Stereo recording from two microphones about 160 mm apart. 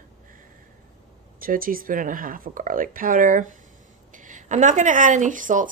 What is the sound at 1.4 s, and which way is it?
Speech, 60° right (ahead or behind).